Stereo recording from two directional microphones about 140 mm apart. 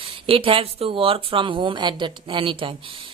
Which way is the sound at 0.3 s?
40° right (ahead or behind).